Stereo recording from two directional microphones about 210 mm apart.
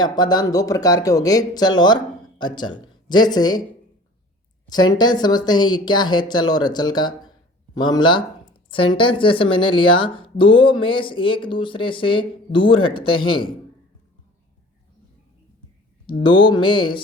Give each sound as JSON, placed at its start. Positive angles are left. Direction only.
{"t": 0.0, "sound": "speech", "side_deg": 20}
{"t": 4.7, "sound": "speech", "side_deg": 20}
{"t": 16.0, "sound": "speech", "side_deg": 25}